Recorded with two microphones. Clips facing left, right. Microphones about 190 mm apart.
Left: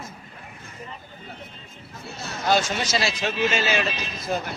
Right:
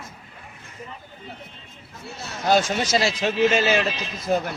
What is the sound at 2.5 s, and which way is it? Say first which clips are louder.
Speech: right 3 dB; 45° right (ahead or behind).